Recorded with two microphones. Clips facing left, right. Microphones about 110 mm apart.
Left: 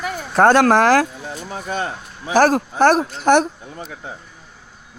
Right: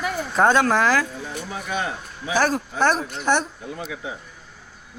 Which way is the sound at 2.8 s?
75° left (ahead or behind).